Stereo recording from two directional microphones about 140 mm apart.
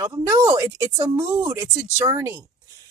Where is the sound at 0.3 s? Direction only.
20° right (ahead or behind).